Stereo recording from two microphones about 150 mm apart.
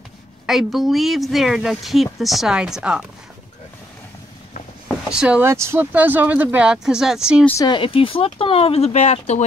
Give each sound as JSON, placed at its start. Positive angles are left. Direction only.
{"t": 0.5, "sound": "speech", "side_deg": 0}
{"t": 4.8, "sound": "vehicle", "side_deg": -5}
{"t": 5.4, "sound": "speech", "side_deg": -15}
{"t": 7.6, "sound": "speech", "side_deg": 35}